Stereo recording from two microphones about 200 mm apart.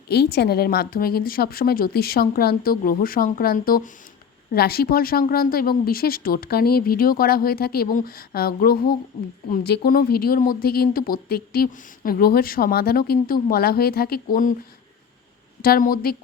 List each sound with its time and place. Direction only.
0.1 s speech: 55° left (ahead or behind)
15.6 s speech: 45° left (ahead or behind)